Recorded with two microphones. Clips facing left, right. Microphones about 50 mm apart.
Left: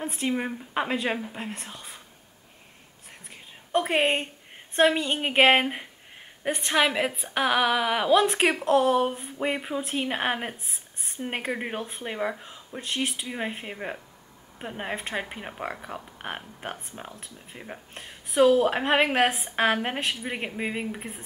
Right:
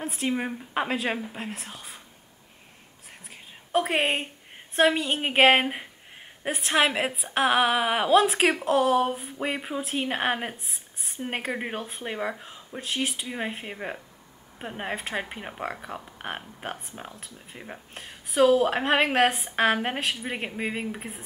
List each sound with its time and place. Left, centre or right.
0.0 s speech: centre
3.3 s a sound: centre
4.7 s a woman's voice: centre
8.1 s speech: centre